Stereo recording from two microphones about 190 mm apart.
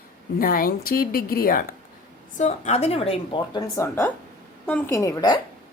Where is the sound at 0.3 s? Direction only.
50° left (ahead or behind).